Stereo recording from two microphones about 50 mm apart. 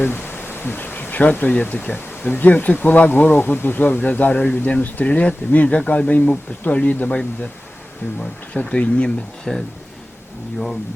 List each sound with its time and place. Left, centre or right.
0.0 s bee: left
1.3 s speech: left
8.5 s speech: left